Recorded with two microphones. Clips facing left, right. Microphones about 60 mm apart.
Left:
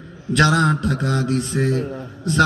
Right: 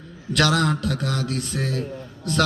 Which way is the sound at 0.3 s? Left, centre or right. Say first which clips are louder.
Left 4 dB; left.